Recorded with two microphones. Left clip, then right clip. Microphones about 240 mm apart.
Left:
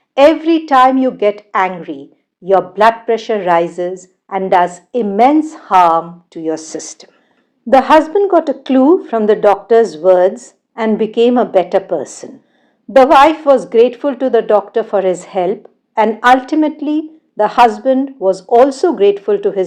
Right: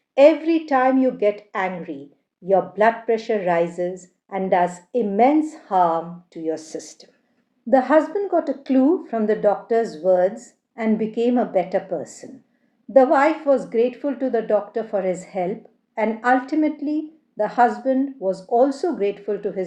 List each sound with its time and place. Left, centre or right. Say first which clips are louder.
0.1 s a woman's voice: left 5 dB; centre